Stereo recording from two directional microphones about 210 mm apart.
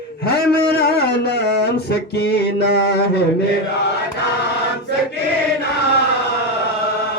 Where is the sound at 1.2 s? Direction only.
50° left (ahead or behind).